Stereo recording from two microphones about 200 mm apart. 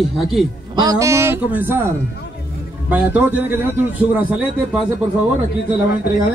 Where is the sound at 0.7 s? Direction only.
15° right (ahead or behind).